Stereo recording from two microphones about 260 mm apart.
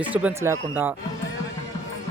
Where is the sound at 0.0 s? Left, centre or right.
Centre.